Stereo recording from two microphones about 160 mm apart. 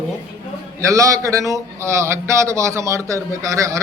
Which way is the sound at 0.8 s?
20° right (ahead or behind).